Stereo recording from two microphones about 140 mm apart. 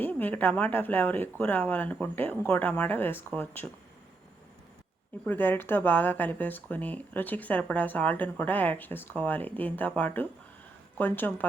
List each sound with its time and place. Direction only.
0.0 s speech: 10° left (ahead or behind)
5.2 s speech: 10° left (ahead or behind)